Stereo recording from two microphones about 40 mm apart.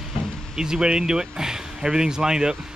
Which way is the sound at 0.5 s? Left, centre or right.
Centre.